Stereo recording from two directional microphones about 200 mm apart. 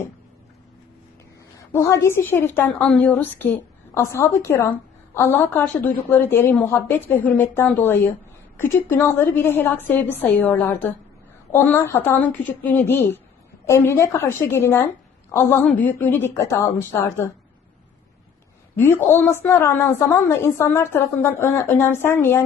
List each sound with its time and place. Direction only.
1.7 s a woman's voice: 15° left (ahead or behind)
18.8 s a woman's voice: 10° left (ahead or behind)